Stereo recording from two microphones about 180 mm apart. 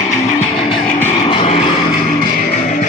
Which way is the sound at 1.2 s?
30° left (ahead or behind).